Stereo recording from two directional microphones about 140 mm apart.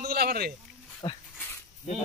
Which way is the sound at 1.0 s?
30° left (ahead or behind).